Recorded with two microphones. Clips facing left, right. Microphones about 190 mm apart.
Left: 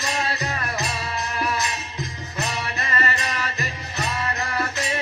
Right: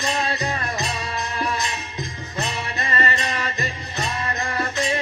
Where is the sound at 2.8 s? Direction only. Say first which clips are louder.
Right 3 dB; 30° right (ahead or behind).